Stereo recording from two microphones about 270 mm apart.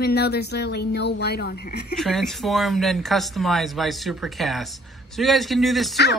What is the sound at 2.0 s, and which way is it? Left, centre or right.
Speech, centre.